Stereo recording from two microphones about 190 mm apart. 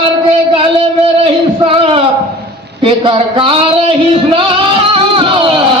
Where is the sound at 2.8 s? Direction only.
30° right (ahead or behind).